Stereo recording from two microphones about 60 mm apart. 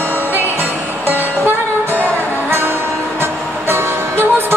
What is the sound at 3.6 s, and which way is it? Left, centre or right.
Music, right.